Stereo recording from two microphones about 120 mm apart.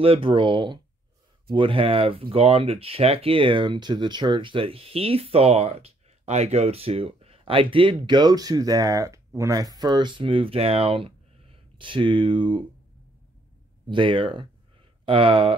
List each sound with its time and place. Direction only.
0.0 s speech: 50° right (ahead or behind)
13.8 s speech: 45° right (ahead or behind)